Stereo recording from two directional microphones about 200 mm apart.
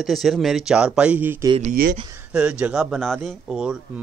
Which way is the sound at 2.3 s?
5° right (ahead or behind).